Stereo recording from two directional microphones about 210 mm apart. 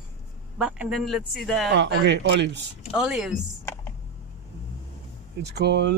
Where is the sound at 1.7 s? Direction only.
55° right (ahead or behind).